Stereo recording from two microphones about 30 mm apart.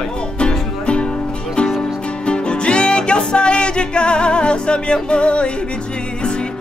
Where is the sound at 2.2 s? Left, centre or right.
Left.